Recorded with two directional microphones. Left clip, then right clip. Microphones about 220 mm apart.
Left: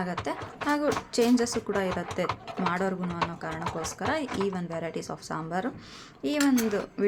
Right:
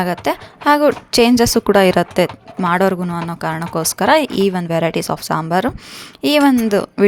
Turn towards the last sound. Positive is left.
turn(degrees=-40)  # may be behind; listen again after turning